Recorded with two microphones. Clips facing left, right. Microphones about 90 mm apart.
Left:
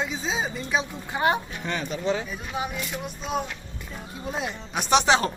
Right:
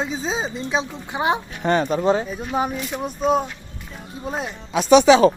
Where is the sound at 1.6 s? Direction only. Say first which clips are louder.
Right 10 dB; 50° right (ahead or behind).